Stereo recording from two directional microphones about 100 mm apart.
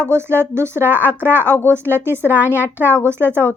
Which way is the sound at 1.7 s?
25° right (ahead or behind).